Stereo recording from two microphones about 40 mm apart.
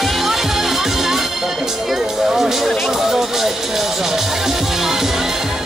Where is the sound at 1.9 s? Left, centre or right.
Centre.